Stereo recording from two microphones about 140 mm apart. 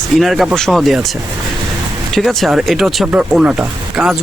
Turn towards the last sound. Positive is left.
turn(degrees=-5)  # may be behind; listen again after turning